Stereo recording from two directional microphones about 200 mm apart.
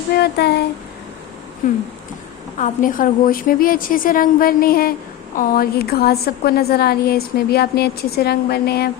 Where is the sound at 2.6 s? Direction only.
40° left (ahead or behind).